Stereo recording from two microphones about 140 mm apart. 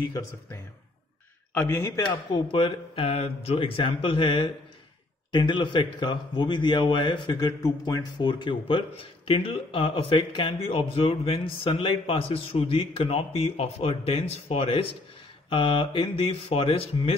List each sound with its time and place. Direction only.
1.5 s a man's voice: 10° left (ahead or behind)
1.8 s a man's voice: 25° left (ahead or behind)
2.4 s a man's voice: 40° left (ahead or behind)